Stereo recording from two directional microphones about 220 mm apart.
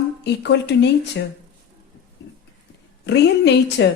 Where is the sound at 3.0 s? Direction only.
50° left (ahead or behind).